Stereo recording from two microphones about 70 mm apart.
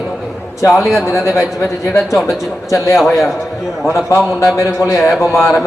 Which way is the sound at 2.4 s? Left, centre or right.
Left.